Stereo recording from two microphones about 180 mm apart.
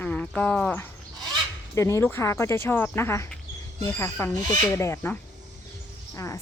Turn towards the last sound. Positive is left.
turn(degrees=15)  # may be behind; listen again after turning